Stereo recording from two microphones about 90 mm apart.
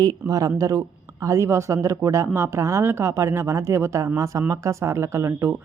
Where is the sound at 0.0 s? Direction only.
45° right (ahead or behind).